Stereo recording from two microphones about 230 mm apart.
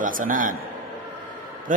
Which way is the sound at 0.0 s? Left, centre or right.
Right.